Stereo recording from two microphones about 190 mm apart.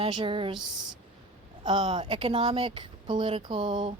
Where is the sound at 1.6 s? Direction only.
25° right (ahead or behind).